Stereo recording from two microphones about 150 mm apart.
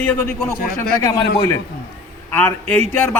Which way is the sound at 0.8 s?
20° left (ahead or behind).